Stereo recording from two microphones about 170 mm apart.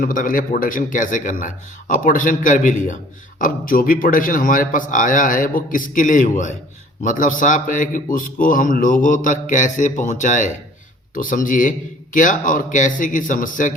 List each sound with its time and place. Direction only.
0.0 s speech: 55° left (ahead or behind)